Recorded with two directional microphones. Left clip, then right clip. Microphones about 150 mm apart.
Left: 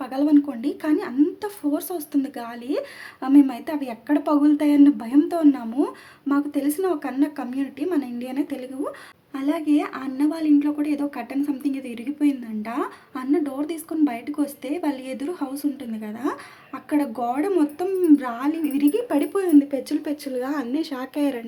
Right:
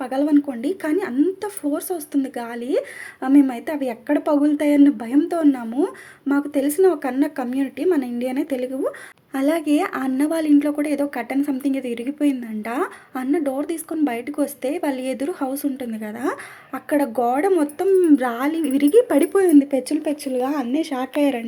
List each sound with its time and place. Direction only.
0.0 s speech: 20° right (ahead or behind)
9.3 s speech: 40° right (ahead or behind); by 20.1 s 25° right (ahead or behind)
20.2 s speech: 10° right (ahead or behind)